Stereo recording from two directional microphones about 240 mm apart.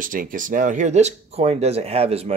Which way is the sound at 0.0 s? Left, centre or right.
Right.